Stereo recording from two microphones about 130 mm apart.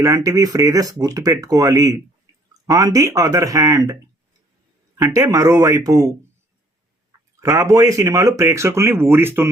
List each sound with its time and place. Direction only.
0.0 s speech: 25° right (ahead or behind)
4.9 s speech: 25° right (ahead or behind)
7.3 s speech: 20° right (ahead or behind)